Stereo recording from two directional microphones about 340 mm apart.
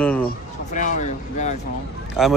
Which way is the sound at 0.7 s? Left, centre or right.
Left.